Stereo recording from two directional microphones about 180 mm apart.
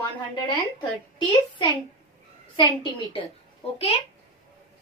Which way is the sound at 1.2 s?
25° left (ahead or behind).